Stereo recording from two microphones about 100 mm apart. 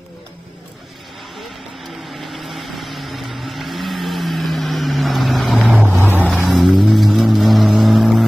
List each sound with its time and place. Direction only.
2.1 s vehicle: centre (ahead or behind)
5.9 s vehicle: 20° right (ahead or behind)
6.4 s vehicle: centre (ahead or behind)